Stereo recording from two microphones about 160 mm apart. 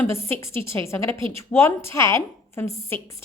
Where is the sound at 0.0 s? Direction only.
15° left (ahead or behind).